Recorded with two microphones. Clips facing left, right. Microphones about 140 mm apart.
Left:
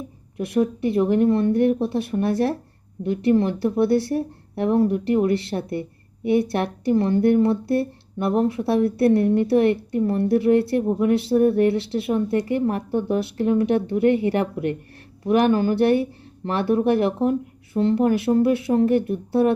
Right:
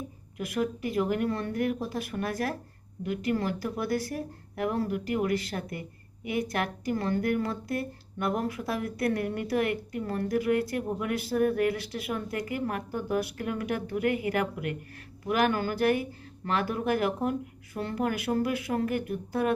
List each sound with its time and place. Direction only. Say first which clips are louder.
0.3 s speech: left 9 dB; 30° left (ahead or behind)